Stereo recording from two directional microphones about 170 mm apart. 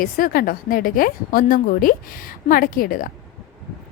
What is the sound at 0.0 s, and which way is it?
A woman's voice, 55° left (ahead or behind).